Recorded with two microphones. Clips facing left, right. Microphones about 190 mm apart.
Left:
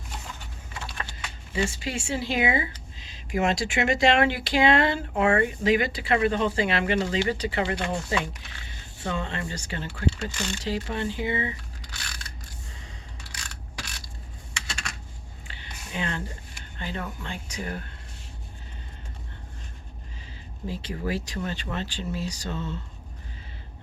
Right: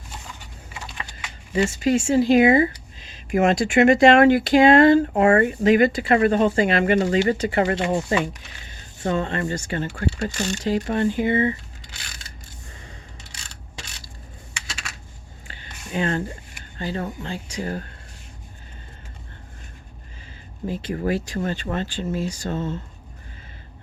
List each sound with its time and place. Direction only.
0.7 s a sound: 15° right (ahead or behind)
1.7 s speech: 45° right (ahead or behind)
14.7 s computer keyboard: 5° right (ahead or behind)
15.4 s a sound: 45° right (ahead or behind)
16.7 s speech: 35° right (ahead or behind)
20.7 s speech: 50° right (ahead or behind)